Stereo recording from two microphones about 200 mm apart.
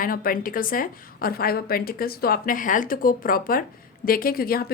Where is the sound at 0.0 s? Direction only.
45° left (ahead or behind).